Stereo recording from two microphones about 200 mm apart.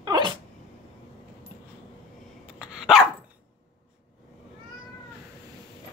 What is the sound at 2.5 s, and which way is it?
Dog, 5° right (ahead or behind).